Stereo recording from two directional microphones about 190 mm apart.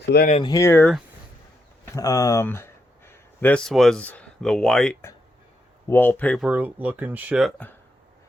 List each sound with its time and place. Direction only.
0.1 s speech: 60° left (ahead or behind)
0.4 s speech: 15° left (ahead or behind)
2.0 s speech: 20° left (ahead or behind)
6.4 s speech: 5° right (ahead or behind)